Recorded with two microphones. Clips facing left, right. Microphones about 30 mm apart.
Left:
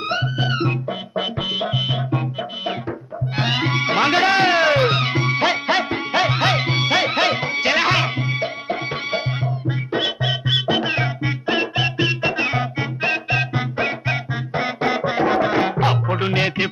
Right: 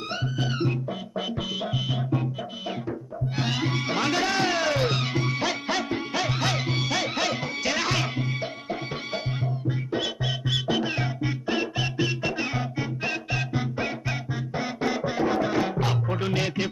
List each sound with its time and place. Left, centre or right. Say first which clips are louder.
0.1 s music: left 7 dB; left
3.3 s music: left 7 dB; left